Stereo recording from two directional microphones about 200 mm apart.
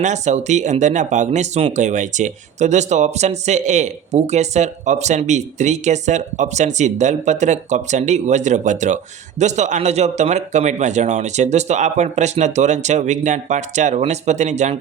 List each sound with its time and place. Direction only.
0.0 s speech: 35° right (ahead or behind)